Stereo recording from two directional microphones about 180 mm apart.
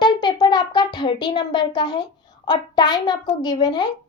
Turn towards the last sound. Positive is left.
turn(degrees=25)  # may be behind; listen again after turning